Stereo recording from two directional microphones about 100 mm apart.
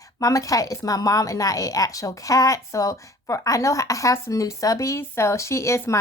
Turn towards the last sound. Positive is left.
turn(degrees=30)  # may be behind; listen again after turning